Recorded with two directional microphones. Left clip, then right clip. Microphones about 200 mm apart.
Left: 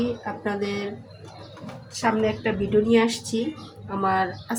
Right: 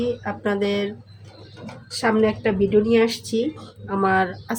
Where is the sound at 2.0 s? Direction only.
45° right (ahead or behind).